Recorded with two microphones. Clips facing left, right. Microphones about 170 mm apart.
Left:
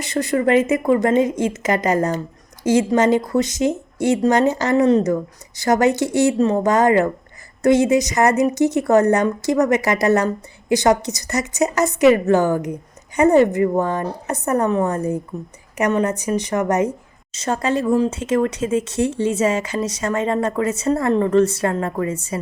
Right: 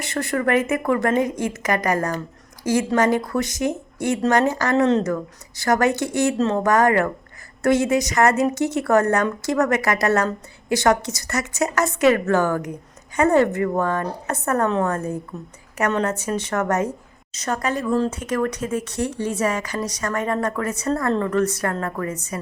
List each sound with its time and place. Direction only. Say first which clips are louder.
0.0 s a woman's voice: left 4 dB; 20° left (ahead or behind)